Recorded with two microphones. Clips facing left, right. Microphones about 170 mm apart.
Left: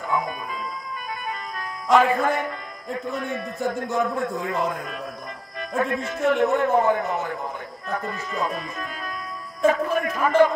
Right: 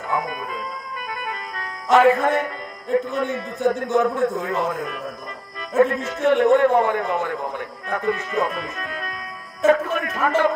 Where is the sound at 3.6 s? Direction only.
70° right (ahead or behind).